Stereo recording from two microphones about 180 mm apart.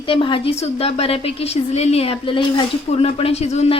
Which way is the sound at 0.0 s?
25° left (ahead or behind).